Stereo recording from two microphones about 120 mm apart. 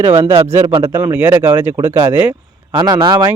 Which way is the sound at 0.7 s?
45° right (ahead or behind).